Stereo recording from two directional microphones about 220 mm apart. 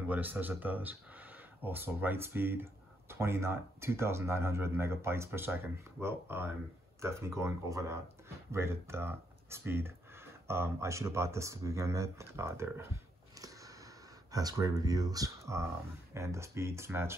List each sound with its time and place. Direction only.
0.1 s speech: 10° right (ahead or behind)